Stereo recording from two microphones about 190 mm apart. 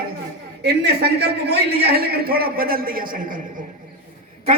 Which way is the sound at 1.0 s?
60° right (ahead or behind).